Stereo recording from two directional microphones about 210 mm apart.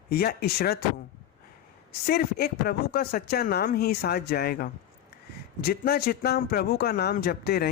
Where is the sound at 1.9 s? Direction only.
45° left (ahead or behind).